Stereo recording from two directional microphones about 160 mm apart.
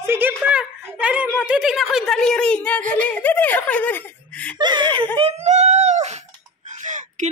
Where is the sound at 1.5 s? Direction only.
5° right (ahead or behind).